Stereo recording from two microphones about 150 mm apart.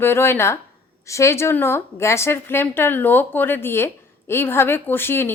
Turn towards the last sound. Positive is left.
turn(degrees=15)  # may be behind; listen again after turning